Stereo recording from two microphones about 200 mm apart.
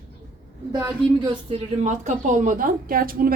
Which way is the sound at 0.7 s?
20° right (ahead or behind).